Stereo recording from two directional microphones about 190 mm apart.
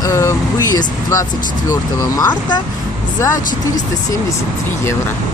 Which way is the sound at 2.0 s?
20° left (ahead or behind).